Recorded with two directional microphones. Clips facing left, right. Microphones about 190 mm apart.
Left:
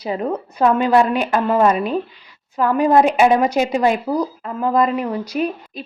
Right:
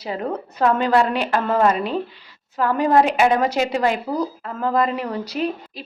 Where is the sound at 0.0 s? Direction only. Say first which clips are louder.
Left 3 dB; 20° left (ahead or behind).